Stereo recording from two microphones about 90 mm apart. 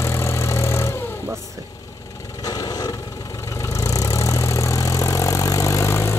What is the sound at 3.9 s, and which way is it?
Vehicle, 40° left (ahead or behind).